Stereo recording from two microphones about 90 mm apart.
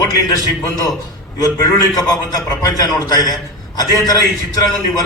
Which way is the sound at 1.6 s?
40° left (ahead or behind).